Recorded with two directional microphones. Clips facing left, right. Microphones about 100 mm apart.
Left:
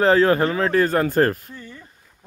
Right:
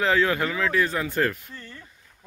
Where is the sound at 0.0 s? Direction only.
40° left (ahead or behind).